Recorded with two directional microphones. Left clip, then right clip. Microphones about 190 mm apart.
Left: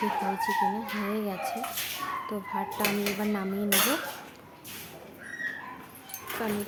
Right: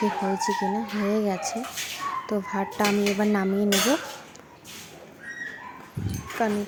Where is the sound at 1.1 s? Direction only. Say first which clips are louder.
Right 8 dB; 30° right (ahead or behind).